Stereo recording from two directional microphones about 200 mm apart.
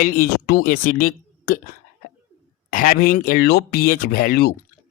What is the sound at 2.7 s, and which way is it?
Speech, 40° left (ahead or behind).